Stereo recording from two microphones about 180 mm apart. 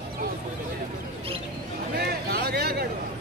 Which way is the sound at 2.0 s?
60° right (ahead or behind).